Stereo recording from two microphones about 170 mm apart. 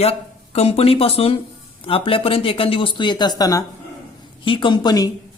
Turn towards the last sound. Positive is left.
turn(degrees=25)  # may be behind; listen again after turning